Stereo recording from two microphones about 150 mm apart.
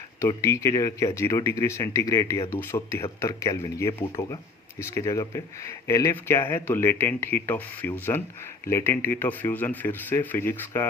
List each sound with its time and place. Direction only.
0.2 s speech: 20° left (ahead or behind)